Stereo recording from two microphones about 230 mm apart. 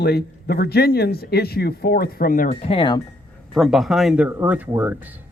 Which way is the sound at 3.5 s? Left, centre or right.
Centre.